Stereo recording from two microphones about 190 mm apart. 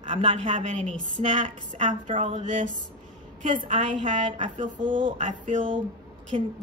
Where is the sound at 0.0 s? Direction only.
25° right (ahead or behind).